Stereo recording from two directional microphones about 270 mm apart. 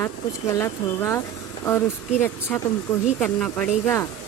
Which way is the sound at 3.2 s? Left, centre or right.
Centre.